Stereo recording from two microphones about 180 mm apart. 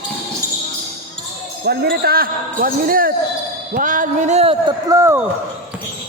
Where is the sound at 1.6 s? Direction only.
60° right (ahead or behind); by 5.2 s 15° right (ahead or behind).